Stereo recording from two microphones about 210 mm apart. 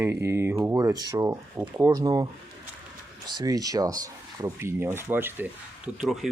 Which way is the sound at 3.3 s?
20° right (ahead or behind).